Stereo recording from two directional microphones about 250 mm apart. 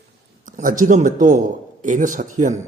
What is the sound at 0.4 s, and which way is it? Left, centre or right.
Speech, right.